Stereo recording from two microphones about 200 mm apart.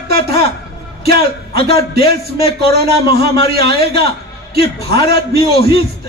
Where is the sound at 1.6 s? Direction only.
50° right (ahead or behind).